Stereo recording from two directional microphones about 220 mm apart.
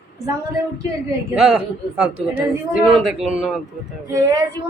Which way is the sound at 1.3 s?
5° right (ahead or behind).